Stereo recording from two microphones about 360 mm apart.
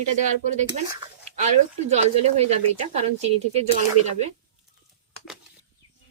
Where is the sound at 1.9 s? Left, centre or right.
Centre.